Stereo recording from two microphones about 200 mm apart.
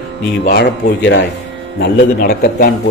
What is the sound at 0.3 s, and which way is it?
A man's voice, 55° left (ahead or behind).